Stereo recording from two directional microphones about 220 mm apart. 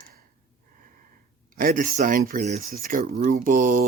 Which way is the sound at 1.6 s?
35° right (ahead or behind).